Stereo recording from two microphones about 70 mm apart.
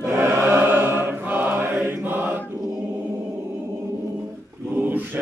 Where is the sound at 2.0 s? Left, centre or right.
Right.